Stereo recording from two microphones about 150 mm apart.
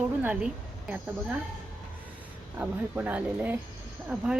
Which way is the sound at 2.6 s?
10° right (ahead or behind).